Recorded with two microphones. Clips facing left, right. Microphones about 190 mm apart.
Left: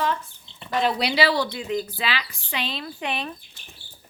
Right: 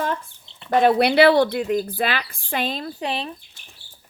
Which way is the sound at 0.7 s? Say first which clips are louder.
Right 7 dB; 55° right (ahead or behind).